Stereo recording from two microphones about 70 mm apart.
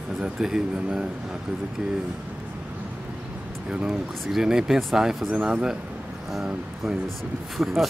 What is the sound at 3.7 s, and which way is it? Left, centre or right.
Speech, centre.